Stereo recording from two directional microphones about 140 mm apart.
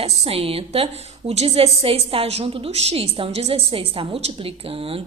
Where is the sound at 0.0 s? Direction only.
45° right (ahead or behind).